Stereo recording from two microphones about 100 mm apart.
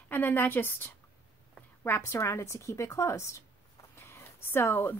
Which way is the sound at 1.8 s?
25° left (ahead or behind).